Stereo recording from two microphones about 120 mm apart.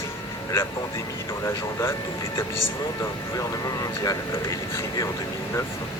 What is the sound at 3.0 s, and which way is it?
Speech, 30° left (ahead or behind).